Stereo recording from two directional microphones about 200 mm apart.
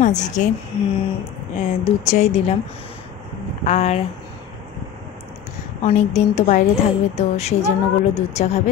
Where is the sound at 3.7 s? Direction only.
35° left (ahead or behind).